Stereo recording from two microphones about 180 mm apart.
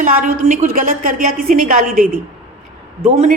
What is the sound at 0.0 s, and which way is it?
A woman's voice, 50° right (ahead or behind).